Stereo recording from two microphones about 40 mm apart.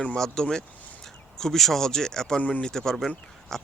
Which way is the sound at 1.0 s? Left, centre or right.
Centre.